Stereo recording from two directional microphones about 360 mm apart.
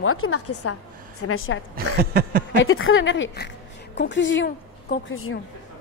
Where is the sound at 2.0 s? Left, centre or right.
Right.